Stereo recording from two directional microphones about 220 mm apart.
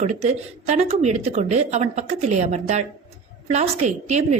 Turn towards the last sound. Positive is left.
turn(degrees=-30)  # may be behind; listen again after turning